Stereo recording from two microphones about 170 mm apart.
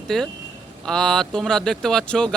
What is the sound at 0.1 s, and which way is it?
Speech, centre (ahead or behind).